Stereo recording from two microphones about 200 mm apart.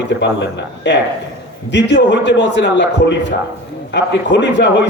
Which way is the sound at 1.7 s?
60° left (ahead or behind).